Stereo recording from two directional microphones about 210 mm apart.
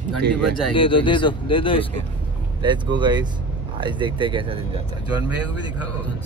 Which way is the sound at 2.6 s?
20° right (ahead or behind).